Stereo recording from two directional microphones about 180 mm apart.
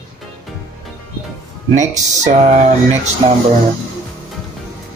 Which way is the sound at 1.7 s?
40° right (ahead or behind).